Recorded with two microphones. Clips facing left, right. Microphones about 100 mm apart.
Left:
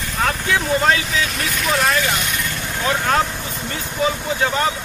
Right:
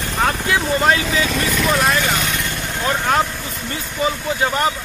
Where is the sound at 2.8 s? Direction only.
5° right (ahead or behind).